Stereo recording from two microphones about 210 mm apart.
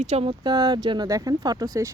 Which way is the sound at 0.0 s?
30° right (ahead or behind).